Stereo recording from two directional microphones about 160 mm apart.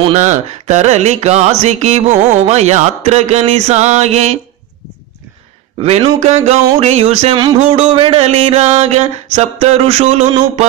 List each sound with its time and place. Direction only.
0.0 s carnatic music: 45° right (ahead or behind)
5.8 s music: 40° right (ahead or behind)
7.3 s music: 30° right (ahead or behind)